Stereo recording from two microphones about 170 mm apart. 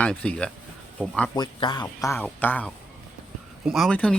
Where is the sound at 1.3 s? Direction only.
25° left (ahead or behind); by 2.7 s 10° left (ahead or behind).